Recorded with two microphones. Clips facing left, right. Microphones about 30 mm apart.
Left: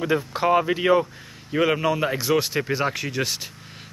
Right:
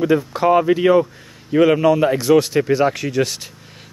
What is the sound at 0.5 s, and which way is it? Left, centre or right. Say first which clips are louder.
Speech: right 5 dB; centre.